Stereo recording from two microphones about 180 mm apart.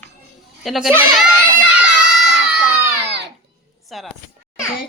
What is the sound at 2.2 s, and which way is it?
Crowd, 5° right (ahead or behind).